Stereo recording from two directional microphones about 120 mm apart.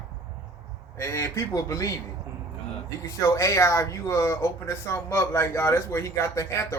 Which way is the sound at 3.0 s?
25° left (ahead or behind).